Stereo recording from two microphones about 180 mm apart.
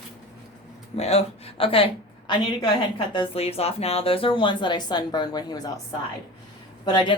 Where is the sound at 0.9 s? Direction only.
35° left (ahead or behind).